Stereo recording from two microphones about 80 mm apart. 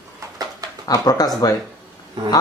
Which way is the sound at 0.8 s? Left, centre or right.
Left.